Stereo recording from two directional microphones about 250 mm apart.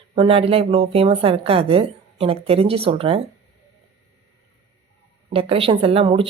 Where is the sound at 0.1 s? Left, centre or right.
Right.